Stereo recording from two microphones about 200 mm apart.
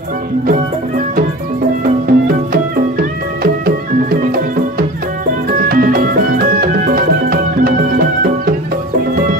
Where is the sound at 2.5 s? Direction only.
45° right (ahead or behind).